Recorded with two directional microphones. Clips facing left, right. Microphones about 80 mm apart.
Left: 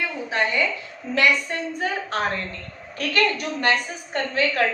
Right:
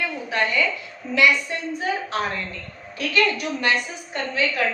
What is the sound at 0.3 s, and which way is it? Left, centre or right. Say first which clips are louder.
Speech: even; left.